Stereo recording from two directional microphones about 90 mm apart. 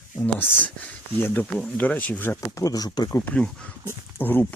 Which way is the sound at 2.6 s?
45° left (ahead or behind).